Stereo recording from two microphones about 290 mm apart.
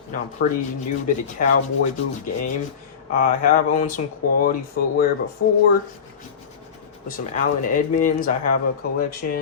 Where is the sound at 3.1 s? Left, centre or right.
Left.